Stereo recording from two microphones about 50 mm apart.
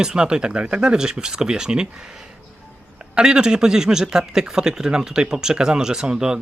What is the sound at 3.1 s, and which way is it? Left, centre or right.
A man's voice, centre.